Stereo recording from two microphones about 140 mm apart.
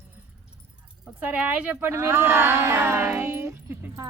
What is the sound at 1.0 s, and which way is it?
A woman's voice, 10° right (ahead or behind).